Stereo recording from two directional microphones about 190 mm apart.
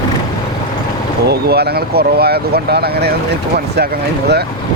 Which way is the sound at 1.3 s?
55° right (ahead or behind).